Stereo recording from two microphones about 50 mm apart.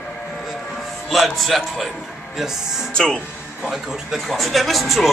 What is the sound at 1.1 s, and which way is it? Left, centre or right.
Speech, centre.